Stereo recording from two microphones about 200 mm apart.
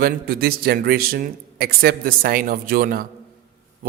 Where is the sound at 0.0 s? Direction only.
50° right (ahead or behind).